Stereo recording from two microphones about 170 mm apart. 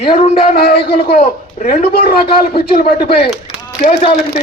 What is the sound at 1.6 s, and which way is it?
A man's voice, 60° left (ahead or behind).